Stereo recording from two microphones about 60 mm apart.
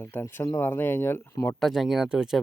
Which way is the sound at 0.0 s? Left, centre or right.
Left.